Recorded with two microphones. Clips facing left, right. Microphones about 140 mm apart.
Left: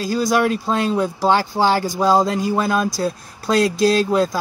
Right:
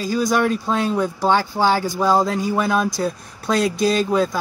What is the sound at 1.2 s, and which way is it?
Speech, 15° left (ahead or behind).